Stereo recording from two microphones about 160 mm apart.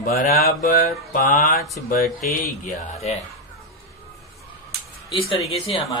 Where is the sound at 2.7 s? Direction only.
45° left (ahead or behind).